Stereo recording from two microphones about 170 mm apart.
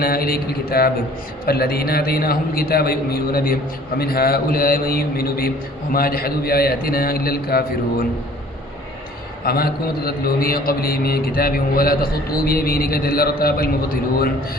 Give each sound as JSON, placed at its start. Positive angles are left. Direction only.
{"t": 0.0, "sound": "a man's voice", "side_deg": 60}
{"t": 9.4, "sound": "a man's voice", "side_deg": 60}